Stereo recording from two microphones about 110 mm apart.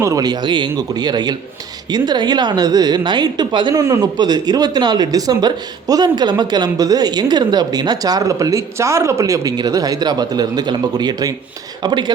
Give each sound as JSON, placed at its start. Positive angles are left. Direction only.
{"t": 0.0, "sound": "speech", "side_deg": -30}
{"t": 3.8, "sound": "a man's voice", "side_deg": -30}